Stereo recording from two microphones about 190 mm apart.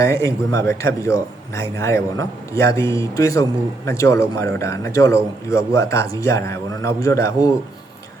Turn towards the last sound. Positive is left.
turn(degrees=15)  # may be behind; listen again after turning